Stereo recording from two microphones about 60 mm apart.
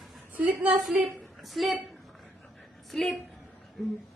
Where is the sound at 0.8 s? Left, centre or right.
Centre.